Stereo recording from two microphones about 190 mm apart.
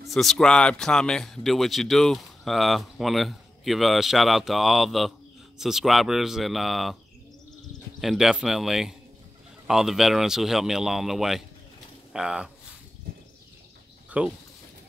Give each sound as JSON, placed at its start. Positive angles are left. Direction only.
{"t": 0.0, "sound": "speech", "side_deg": 0}
{"t": 8.0, "sound": "speech", "side_deg": 0}
{"t": 14.2, "sound": "speech", "side_deg": -5}